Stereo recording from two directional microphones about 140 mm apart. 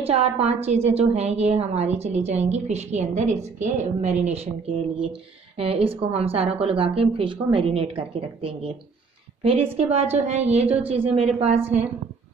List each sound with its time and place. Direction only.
0.0 s a woman's voice: 45° right (ahead or behind)
9.8 s a woman's voice: 50° right (ahead or behind)